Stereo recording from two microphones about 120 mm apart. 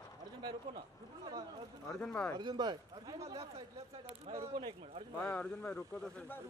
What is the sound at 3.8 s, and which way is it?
Speech, 55° right (ahead or behind).